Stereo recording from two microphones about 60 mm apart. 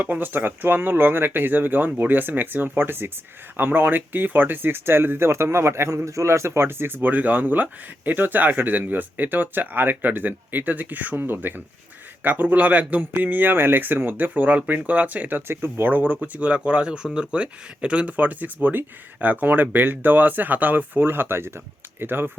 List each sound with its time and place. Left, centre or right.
0.0 s speech: right